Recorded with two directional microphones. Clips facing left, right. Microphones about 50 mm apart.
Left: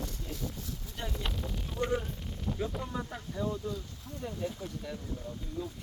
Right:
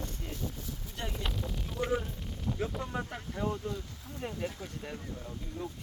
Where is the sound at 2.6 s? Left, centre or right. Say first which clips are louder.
Even; centre.